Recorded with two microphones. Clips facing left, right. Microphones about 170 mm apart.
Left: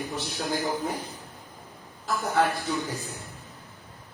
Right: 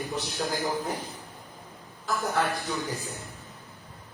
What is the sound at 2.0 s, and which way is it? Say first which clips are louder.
Speech: left 2 dB; centre (ahead or behind).